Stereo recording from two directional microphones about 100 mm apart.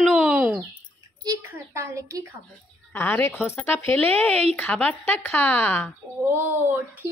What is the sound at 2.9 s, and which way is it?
A woman's voice, 20° left (ahead or behind).